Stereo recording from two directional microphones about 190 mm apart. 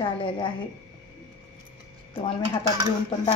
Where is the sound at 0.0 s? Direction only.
25° left (ahead or behind).